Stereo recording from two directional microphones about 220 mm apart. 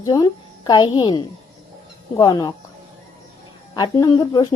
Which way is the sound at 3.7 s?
20° left (ahead or behind).